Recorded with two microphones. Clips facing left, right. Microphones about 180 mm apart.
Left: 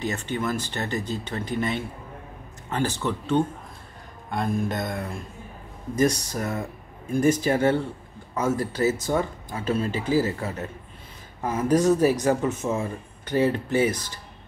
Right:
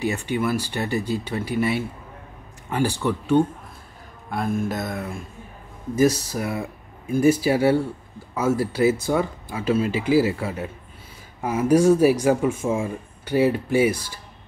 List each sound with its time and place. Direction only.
0.0 s speech: 10° right (ahead or behind)